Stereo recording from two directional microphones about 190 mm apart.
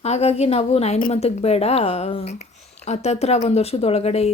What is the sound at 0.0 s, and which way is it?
Speech, 35° left (ahead or behind).